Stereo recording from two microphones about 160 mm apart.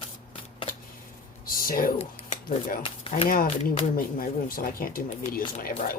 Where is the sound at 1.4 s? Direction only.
65° left (ahead or behind).